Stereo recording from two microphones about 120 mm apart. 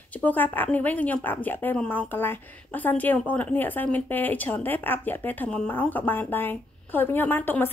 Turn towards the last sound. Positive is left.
turn(degrees=15)  # may be behind; listen again after turning